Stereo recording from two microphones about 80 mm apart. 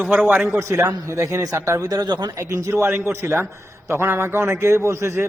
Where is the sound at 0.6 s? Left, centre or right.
Right.